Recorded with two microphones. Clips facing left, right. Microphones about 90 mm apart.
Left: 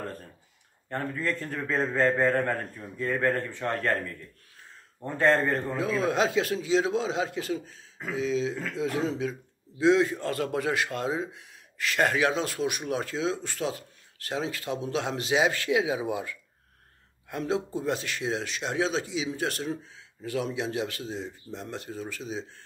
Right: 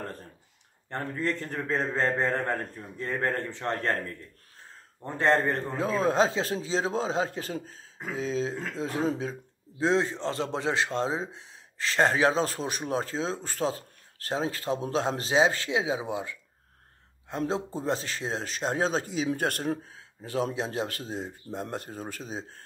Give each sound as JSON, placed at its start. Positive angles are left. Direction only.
{"t": 1.7, "sound": "mantra", "side_deg": -25}
{"t": 5.0, "sound": "mantra", "side_deg": -20}
{"t": 5.8, "sound": "a man's voice", "side_deg": -35}
{"t": 17.4, "sound": "a man's voice", "side_deg": -30}
{"t": 20.2, "sound": "speech", "side_deg": -35}